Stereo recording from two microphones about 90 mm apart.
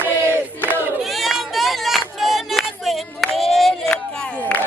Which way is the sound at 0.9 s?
Centre (ahead or behind).